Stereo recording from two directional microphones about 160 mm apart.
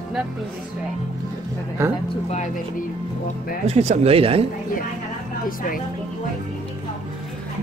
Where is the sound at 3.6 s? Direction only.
45° right (ahead or behind).